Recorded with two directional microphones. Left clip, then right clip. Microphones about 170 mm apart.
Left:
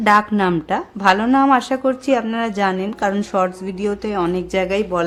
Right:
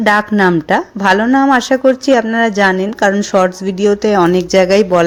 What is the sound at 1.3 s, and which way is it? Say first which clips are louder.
Speech: right 4 dB; 10° right (ahead or behind).